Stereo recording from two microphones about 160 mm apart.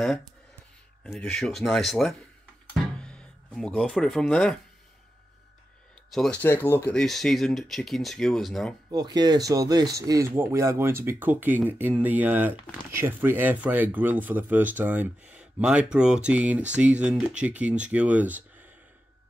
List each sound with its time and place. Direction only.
1.0 s speech: 5° left (ahead or behind)
2.7 s music: 5° left (ahead or behind)
6.1 s speech: centre (ahead or behind)
6.4 s speech: 10° left (ahead or behind)
7.0 s speech: centre (ahead or behind)
8.9 s speech: 25° right (ahead or behind); by 18.4 s 10° right (ahead or behind)